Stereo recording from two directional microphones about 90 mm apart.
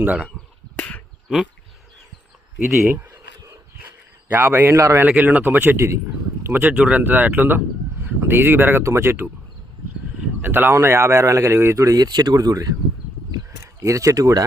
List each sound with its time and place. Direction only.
0.8 s a sound: 20° left (ahead or behind)
2.6 s speech: 5° right (ahead or behind)
2.9 s speech: 25° right (ahead or behind)
5.0 s speech: 15° right (ahead or behind)
10.4 s speech: 25° right (ahead or behind)
12.0 s speech: 50° right (ahead or behind)
13.7 s speech: 35° right (ahead or behind)